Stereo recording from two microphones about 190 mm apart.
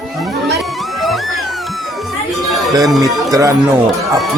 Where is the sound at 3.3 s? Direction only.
15° right (ahead or behind).